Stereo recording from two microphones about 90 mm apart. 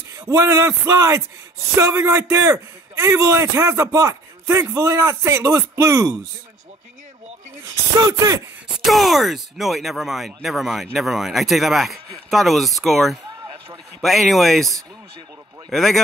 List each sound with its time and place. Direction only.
0.2 s a man's voice: 35° right (ahead or behind)
8.0 s a man's voice: 40° right (ahead or behind)
8.8 s speech: centre (ahead or behind)
15.7 s speech: 5° left (ahead or behind)